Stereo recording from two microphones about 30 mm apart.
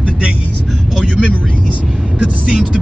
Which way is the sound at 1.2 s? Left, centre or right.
Right.